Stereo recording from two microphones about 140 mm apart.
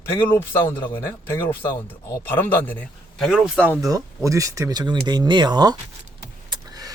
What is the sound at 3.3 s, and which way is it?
Speech, 5° right (ahead or behind).